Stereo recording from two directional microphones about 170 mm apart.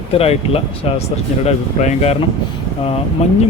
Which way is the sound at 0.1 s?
35° left (ahead or behind).